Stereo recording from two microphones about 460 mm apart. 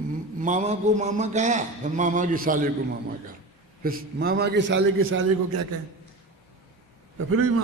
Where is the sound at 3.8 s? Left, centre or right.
Centre.